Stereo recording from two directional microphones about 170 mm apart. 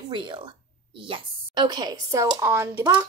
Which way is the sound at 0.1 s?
30° right (ahead or behind).